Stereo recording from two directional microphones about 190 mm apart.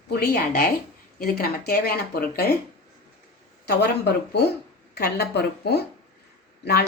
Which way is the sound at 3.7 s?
60° left (ahead or behind).